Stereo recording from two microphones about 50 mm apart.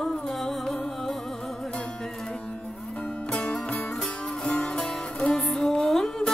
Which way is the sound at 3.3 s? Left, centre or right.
Left.